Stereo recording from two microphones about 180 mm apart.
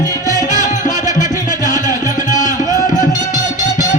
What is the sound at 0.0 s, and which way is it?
Music, 20° left (ahead or behind).